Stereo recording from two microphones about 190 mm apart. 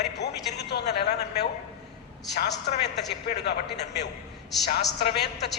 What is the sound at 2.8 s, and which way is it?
A man's voice, 60° left (ahead or behind).